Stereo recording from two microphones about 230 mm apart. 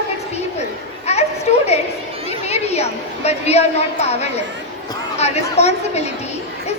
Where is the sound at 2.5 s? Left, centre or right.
Left.